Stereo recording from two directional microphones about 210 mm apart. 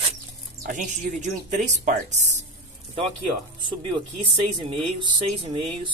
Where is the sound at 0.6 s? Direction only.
35° right (ahead or behind).